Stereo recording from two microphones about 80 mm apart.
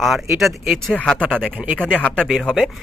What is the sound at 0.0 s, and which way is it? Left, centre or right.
Speech, centre.